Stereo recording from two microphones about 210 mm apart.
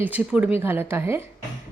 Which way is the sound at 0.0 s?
5° right (ahead or behind).